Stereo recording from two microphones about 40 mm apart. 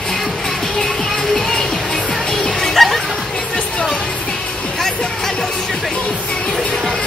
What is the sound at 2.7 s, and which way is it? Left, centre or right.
Music, centre.